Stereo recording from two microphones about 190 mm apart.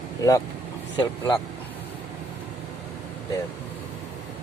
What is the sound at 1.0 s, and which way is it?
Speech, 25° left (ahead or behind).